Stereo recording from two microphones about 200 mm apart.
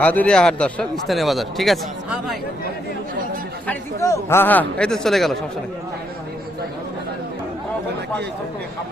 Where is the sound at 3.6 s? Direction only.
15° left (ahead or behind).